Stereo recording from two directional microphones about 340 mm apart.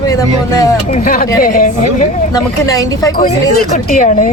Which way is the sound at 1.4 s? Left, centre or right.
Left.